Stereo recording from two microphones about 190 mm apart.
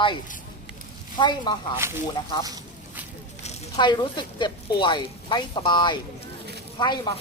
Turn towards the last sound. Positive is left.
turn(degrees=25)  # may be behind; listen again after turning